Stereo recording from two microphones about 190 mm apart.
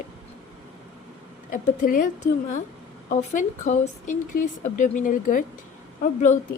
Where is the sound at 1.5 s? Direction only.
45° left (ahead or behind).